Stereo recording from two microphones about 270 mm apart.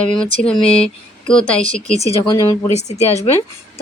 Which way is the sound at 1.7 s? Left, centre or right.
Left.